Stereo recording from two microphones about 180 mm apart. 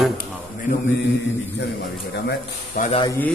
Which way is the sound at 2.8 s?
45° left (ahead or behind).